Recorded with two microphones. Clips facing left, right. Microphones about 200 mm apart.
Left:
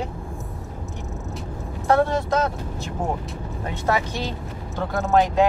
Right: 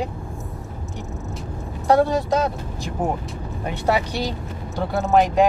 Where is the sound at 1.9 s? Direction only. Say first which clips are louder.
Right 2 dB; 15° right (ahead or behind).